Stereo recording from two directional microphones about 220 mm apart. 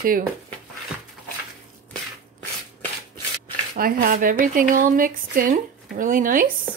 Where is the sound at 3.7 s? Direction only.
40° right (ahead or behind).